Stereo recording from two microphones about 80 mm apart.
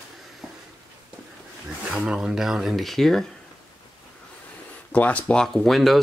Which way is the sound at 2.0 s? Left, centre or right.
Centre.